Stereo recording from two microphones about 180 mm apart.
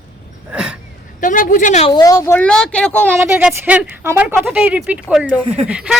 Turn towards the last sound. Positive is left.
turn(degrees=-5)  # may be behind; listen again after turning